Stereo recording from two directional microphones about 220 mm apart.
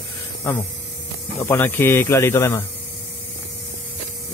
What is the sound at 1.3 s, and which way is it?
Speech, 10° left (ahead or behind).